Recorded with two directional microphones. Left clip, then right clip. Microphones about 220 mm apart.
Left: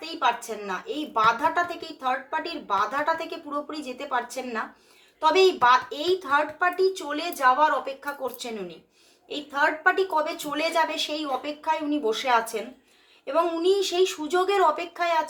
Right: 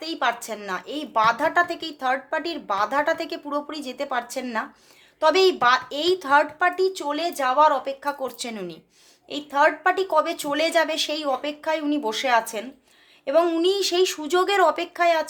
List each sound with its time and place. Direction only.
0.0 s speech: 55° right (ahead or behind)